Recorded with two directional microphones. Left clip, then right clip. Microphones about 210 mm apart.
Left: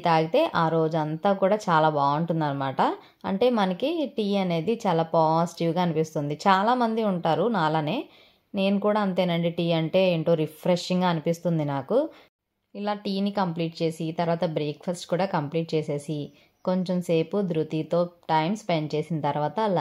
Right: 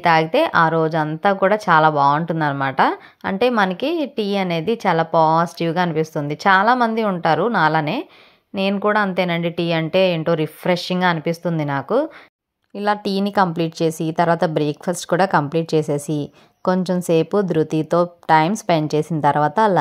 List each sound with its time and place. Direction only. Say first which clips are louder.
0.0 s a woman's voice: right 6 dB; 15° right (ahead or behind)
12.7 s a woman's voice: right 9 dB; 35° right (ahead or behind)